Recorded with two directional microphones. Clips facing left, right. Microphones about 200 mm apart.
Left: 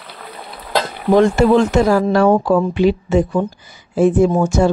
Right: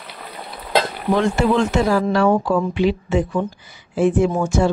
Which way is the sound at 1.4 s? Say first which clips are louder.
Left 5 dB; 45° left (ahead or behind).